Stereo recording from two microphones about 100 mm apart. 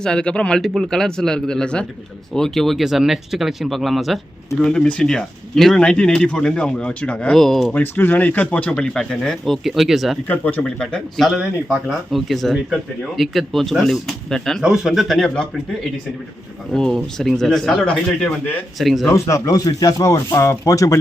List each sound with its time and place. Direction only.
0.0 s speech: 10° left (ahead or behind)
7.7 s speech: 20° left (ahead or behind); by 10.2 s centre (ahead or behind)
10.2 s speech: 15° left (ahead or behind)
10.8 s speech: 5° left (ahead or behind)
18.8 s speech: centre (ahead or behind)
19.1 s speech: 30° left (ahead or behind)